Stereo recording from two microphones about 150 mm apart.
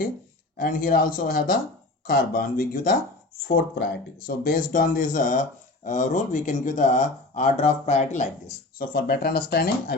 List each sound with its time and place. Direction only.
0.5 s speech: 70° left (ahead or behind)
4.3 s speech: 75° left (ahead or behind); by 8.3 s 50° left (ahead or behind)
8.8 s speech: 70° left (ahead or behind)